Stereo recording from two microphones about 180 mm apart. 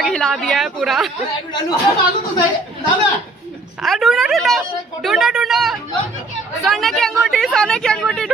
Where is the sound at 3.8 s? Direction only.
Centre (ahead or behind).